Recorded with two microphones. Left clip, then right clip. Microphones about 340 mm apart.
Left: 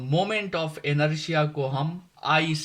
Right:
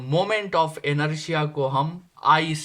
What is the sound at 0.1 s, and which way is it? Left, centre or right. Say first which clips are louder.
Speech: right 3 dB; right.